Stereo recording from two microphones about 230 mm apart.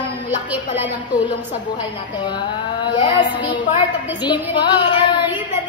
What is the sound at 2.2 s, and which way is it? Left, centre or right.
A woman's voice, centre.